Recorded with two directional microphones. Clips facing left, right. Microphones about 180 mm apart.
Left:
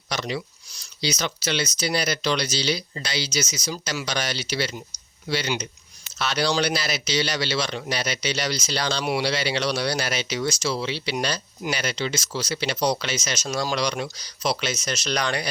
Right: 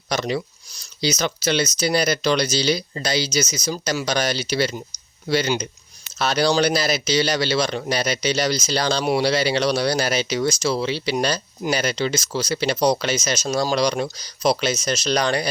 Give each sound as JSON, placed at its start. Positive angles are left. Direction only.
{"t": 0.1, "sound": "a man's voice", "side_deg": -45}